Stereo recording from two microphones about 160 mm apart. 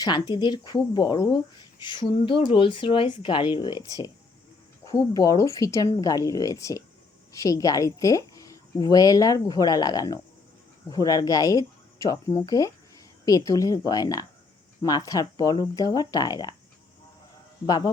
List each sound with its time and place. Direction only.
0.0 s speech: 25° left (ahead or behind)
17.7 s speech: 25° left (ahead or behind)